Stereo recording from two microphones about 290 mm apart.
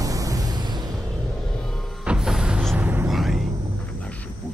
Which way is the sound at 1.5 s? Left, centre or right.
Centre.